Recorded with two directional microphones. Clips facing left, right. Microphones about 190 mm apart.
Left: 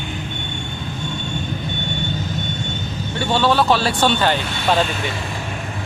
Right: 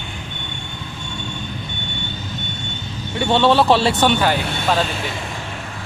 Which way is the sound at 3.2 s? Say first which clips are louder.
Right 3 dB; 25° right (ahead or behind).